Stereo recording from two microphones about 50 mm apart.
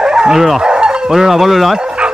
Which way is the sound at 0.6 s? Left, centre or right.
Centre.